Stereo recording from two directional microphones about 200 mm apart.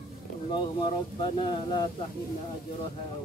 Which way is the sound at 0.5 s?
20° left (ahead or behind).